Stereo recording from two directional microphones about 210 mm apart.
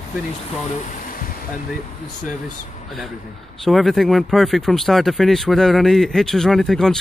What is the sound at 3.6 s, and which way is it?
Speech, centre (ahead or behind).